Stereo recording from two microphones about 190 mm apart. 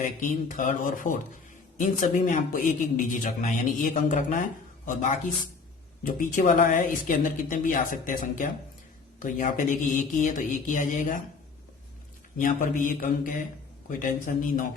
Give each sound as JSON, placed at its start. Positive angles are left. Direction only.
{"t": 0.0, "sound": "a man's voice", "side_deg": 45}
{"t": 6.0, "sound": "speech", "side_deg": 40}
{"t": 12.4, "sound": "speech", "side_deg": 45}